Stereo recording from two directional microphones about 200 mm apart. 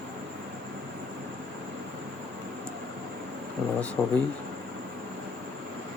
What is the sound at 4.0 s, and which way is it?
Speech, centre (ahead or behind).